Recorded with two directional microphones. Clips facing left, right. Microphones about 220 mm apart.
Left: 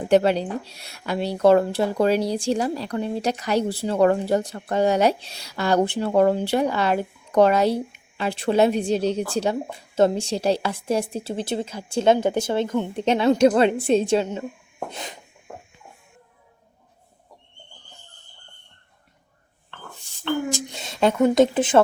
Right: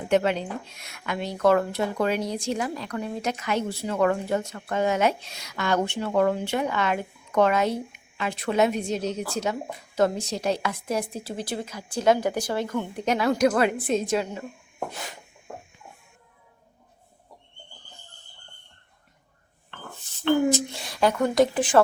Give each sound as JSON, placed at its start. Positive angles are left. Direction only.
{"t": 0.1, "sound": "speech", "side_deg": 35}
{"t": 20.5, "sound": "speech", "side_deg": 20}